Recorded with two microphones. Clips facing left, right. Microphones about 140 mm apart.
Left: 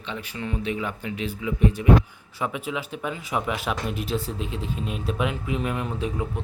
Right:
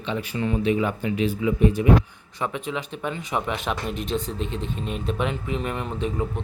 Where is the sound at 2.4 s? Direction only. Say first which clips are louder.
Right 1 dB; 5° left (ahead or behind).